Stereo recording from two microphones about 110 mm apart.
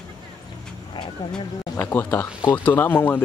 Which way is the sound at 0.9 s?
50° left (ahead or behind).